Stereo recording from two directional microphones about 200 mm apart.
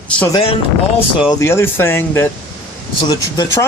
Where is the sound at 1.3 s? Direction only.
15° left (ahead or behind).